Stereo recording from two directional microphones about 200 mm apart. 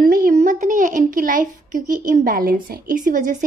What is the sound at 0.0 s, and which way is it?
A woman's voice, 45° right (ahead or behind).